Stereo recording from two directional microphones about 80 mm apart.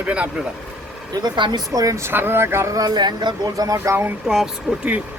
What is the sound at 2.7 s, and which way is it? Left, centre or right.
Speech, right.